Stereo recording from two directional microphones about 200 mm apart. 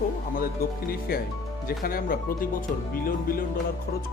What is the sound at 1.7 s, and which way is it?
Speech, 45° left (ahead or behind).